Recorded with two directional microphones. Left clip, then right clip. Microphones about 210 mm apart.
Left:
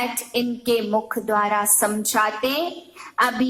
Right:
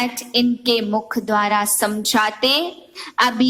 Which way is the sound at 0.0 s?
45° right (ahead or behind).